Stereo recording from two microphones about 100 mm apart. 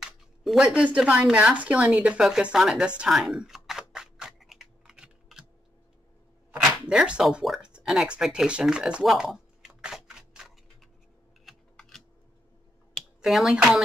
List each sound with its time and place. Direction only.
0.0 s a sound: 5° right (ahead or behind)
0.7 s a woman's voice: 15° right (ahead or behind)
3.0 s computer keyboard: 5° right (ahead or behind)
6.5 s a sound: 10° right (ahead or behind)
11.4 s typing: 5° left (ahead or behind)
13.2 s speech: centre (ahead or behind)